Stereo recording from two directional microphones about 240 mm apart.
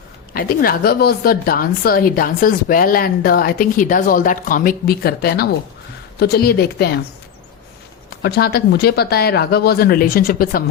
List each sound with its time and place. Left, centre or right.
0.3 s speech: left
8.2 s speech: left